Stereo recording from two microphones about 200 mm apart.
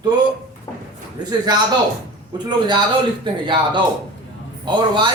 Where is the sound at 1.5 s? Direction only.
20° right (ahead or behind).